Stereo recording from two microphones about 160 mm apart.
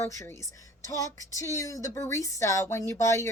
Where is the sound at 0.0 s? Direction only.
20° left (ahead or behind).